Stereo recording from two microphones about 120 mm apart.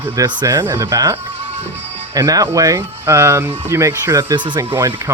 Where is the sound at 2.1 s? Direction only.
35° right (ahead or behind).